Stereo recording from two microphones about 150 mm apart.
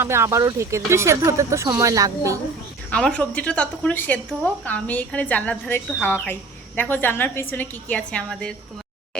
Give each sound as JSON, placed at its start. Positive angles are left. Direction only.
{"t": 0.0, "sound": "a woman's voice", "side_deg": -20}
{"t": 2.9, "sound": "a woman's voice", "side_deg": 5}